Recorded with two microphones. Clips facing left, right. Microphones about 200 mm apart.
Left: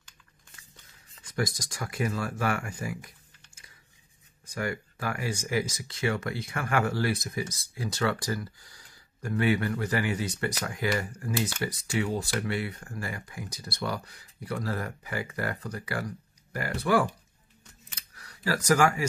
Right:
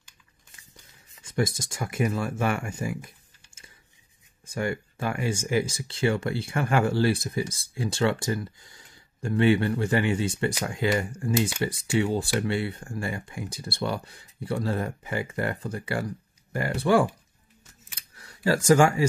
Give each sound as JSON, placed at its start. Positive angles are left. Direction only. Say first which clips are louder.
{"t": 1.2, "sound": "speech", "louder": "right 4 dB", "side_deg": -25}
{"t": 4.5, "sound": "speech", "louder": "right 3 dB", "side_deg": -25}
{"t": 17.9, "sound": "camera", "louder": "right 3 dB", "side_deg": -25}